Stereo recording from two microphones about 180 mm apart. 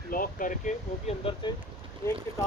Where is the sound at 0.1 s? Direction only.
50° left (ahead or behind).